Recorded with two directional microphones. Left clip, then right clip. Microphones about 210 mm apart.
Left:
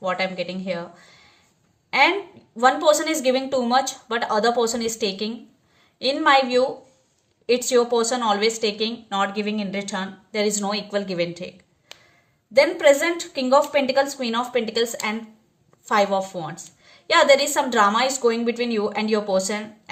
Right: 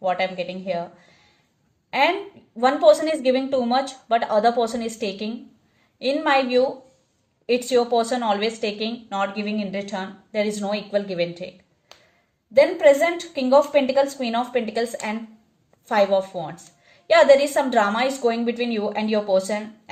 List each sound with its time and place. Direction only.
0.1 s a woman's voice: 35° left (ahead or behind)
1.9 s a woman's voice: 35° left (ahead or behind)
11.9 s a sound: 20° left (ahead or behind)
12.5 s a woman's voice: 35° left (ahead or behind)